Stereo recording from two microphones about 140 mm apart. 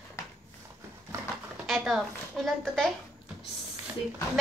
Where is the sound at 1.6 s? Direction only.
Centre (ahead or behind).